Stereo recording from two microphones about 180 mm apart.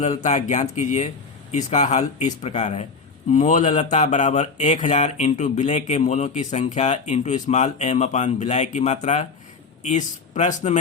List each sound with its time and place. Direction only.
0.0 s speech: 40° left (ahead or behind)